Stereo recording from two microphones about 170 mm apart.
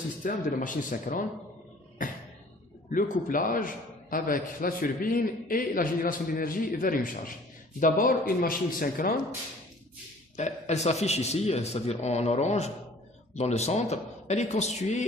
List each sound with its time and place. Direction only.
0.2 s speech: 50° left (ahead or behind)
2.9 s a man's voice: 55° left (ahead or behind)
10.3 s a man's voice: 40° left (ahead or behind)